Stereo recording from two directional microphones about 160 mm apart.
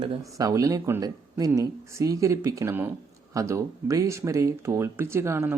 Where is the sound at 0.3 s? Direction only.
20° right (ahead or behind).